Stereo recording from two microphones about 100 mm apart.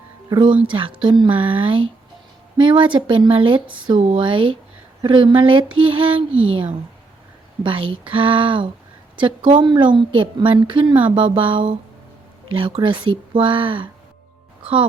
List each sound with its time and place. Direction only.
0.3 s speech: 50° right (ahead or behind)
7.6 s speech: 60° right (ahead or behind)